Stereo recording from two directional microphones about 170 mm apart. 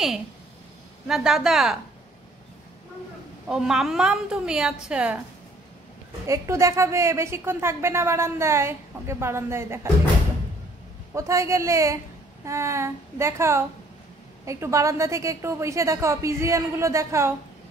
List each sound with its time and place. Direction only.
1.0 s a woman's voice: centre (ahead or behind)
3.4 s a woman's voice: 5° right (ahead or behind)
6.2 s a woman's voice: 15° right (ahead or behind)
11.1 s a woman's voice: 15° right (ahead or behind)